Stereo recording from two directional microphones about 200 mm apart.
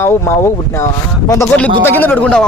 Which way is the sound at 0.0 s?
10° left (ahead or behind).